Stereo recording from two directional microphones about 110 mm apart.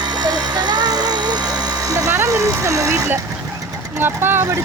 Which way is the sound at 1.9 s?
25° right (ahead or behind).